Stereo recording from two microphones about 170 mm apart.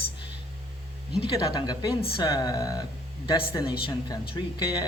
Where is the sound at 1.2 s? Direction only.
25° left (ahead or behind).